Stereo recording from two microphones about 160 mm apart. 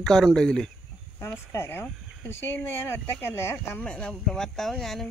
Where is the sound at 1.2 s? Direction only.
15° left (ahead or behind).